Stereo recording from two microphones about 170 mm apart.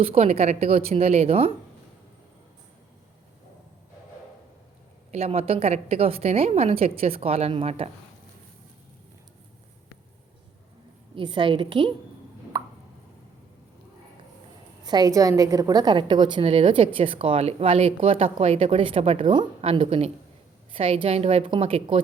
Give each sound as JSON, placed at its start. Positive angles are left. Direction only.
{"t": 0.0, "sound": "a woman's voice", "side_deg": -35}
{"t": 5.1, "sound": "a woman's voice", "side_deg": -35}
{"t": 11.1, "sound": "a woman's voice", "side_deg": -30}
{"t": 12.5, "sound": "plop", "side_deg": -25}
{"t": 14.8, "sound": "a woman's voice", "side_deg": -25}